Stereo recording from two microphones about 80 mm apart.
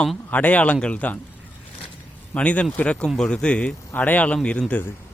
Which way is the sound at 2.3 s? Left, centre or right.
Centre.